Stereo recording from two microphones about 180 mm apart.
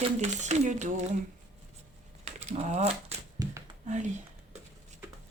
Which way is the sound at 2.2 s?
40° right (ahead or behind).